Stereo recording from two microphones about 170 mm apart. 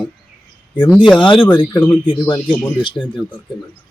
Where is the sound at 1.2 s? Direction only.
30° left (ahead or behind).